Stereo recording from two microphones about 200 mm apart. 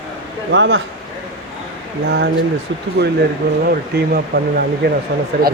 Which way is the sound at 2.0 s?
55° right (ahead or behind).